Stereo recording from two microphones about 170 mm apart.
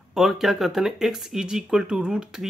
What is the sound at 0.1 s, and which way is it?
Speech, centre (ahead or behind).